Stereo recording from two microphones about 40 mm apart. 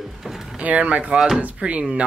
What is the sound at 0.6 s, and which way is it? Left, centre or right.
Speech, right.